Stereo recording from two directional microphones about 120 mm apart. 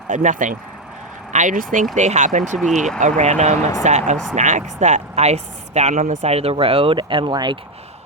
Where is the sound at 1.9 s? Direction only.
80° right.